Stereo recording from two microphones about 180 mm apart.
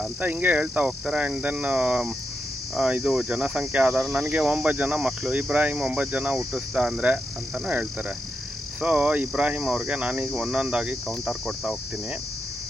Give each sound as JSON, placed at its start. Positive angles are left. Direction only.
{"t": 0.0, "sound": "speech", "side_deg": -10}